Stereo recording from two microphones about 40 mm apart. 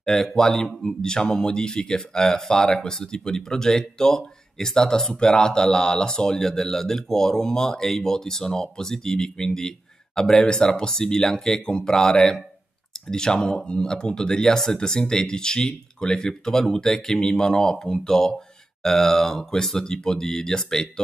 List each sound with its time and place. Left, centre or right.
0.0 s speech: centre
0.7 s speech: centre
1.0 s speech: centre